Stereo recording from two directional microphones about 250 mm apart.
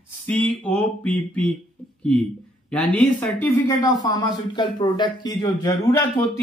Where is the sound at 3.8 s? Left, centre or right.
Centre.